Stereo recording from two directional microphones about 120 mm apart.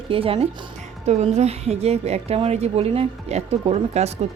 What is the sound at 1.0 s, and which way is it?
A woman's voice, 65° right (ahead or behind).